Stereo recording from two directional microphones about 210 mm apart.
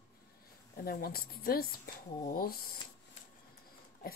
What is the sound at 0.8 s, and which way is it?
Speech, 45° left (ahead or behind).